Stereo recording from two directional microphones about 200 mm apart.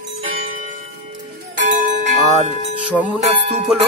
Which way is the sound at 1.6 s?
40° right (ahead or behind).